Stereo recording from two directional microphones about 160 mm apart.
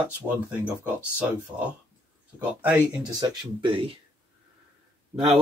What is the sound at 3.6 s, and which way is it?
Speech, 30° right (ahead or behind).